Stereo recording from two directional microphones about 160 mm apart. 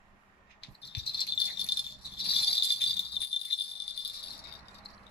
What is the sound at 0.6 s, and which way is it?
Rattle, 90° left.